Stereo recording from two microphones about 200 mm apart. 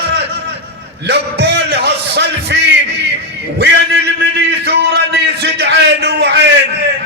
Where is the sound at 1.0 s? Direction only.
55° right (ahead or behind).